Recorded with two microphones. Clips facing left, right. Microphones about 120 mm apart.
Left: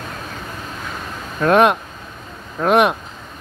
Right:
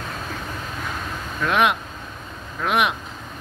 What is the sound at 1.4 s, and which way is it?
Speech, 45° left (ahead or behind).